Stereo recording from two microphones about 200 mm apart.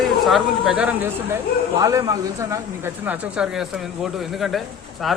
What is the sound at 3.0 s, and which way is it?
Speech, 5° right (ahead or behind).